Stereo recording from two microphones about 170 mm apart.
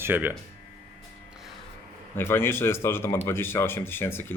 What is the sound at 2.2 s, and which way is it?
Speech, 15° left (ahead or behind).